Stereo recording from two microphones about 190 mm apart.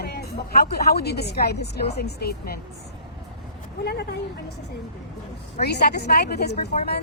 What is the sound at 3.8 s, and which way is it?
Speech, 60° left (ahead or behind).